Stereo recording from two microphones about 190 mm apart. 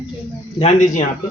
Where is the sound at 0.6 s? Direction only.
40° left (ahead or behind).